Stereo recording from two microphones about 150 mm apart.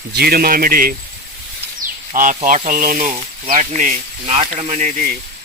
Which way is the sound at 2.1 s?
60° right (ahead or behind).